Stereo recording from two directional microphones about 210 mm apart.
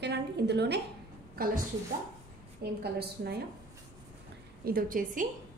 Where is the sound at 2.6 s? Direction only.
50° right (ahead or behind).